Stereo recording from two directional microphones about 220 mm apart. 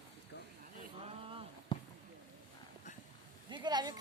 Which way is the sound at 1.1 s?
25° right (ahead or behind).